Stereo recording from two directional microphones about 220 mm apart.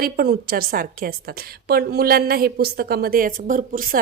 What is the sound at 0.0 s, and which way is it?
A woman's voice, 45° right (ahead or behind).